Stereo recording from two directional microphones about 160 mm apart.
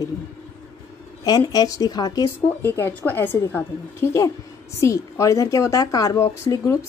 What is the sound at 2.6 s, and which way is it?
A woman's voice, 15° left (ahead or behind).